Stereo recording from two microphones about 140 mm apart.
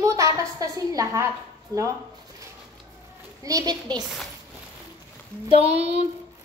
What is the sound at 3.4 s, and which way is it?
Speech, 25° right (ahead or behind).